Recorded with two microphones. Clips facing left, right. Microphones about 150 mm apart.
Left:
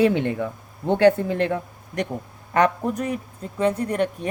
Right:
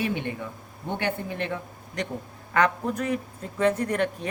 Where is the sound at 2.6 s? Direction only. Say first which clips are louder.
Left 4 dB; 40° left (ahead or behind).